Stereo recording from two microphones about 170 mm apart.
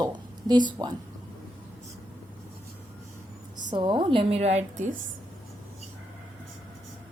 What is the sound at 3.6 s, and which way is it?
A woman's voice, 25° right (ahead or behind).